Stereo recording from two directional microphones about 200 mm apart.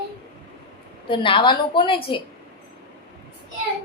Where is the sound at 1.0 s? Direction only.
25° left (ahead or behind).